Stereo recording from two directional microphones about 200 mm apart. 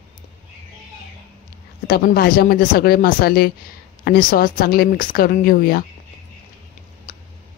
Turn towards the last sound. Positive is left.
turn(degrees=45)  # may be behind; listen again after turning